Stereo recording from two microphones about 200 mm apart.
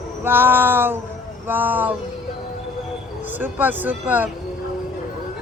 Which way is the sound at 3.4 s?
10° right (ahead or behind).